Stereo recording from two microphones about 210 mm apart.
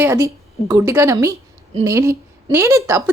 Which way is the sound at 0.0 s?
10° right (ahead or behind).